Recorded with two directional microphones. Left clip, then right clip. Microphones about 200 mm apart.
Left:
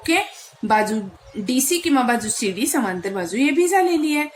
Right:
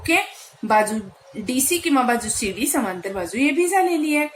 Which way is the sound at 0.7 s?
15° left (ahead or behind).